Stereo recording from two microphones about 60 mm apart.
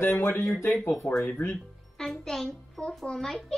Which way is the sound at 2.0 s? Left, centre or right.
Centre.